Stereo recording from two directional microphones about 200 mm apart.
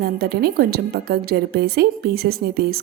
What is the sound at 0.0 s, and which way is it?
A woman's voice, 50° right (ahead or behind).